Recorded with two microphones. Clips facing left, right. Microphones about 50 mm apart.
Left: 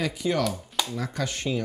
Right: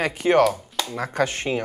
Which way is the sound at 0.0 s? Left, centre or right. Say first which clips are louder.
Right 8 dB; right.